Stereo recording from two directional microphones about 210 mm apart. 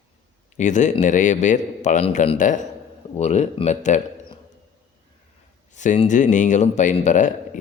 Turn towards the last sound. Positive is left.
turn(degrees=35)  # may be behind; listen again after turning